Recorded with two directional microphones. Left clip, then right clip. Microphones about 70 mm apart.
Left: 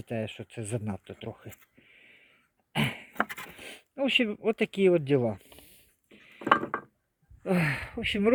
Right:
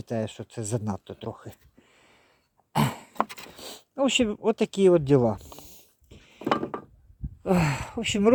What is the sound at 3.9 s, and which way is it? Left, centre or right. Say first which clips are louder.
Speech: right 2 dB; right.